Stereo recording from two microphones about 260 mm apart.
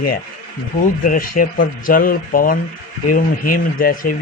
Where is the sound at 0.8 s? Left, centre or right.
Left.